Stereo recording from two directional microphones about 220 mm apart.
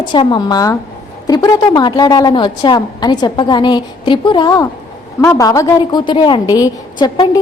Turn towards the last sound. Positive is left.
turn(degrees=15)  # may be behind; listen again after turning